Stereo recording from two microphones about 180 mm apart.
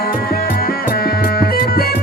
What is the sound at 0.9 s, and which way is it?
Music, 60° left (ahead or behind).